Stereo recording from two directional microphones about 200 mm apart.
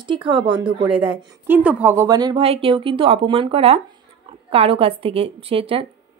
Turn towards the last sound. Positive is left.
turn(degrees=-25)  # may be behind; listen again after turning